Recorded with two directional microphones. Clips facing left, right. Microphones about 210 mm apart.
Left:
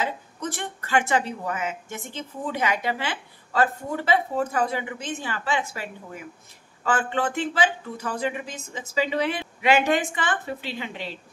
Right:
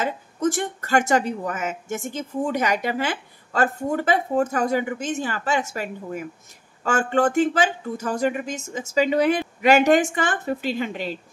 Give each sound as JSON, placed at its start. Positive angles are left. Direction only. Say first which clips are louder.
{"t": 0.0, "sound": "speech", "louder": "right 6 dB", "side_deg": -45}